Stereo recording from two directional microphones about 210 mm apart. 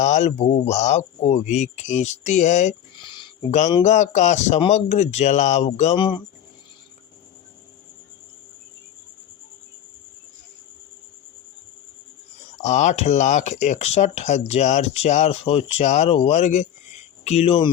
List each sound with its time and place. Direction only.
0.0 s speech: 35° left (ahead or behind)
12.6 s speech: 35° left (ahead or behind)